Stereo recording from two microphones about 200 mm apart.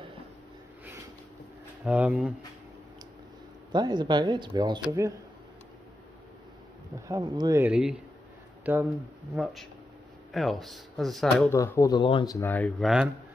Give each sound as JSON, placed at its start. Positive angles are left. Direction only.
{"t": 1.9, "sound": "speech", "side_deg": -5}
{"t": 3.7, "sound": "speech", "side_deg": -20}
{"t": 7.1, "sound": "speech", "side_deg": -20}
{"t": 11.5, "sound": "speech", "side_deg": 15}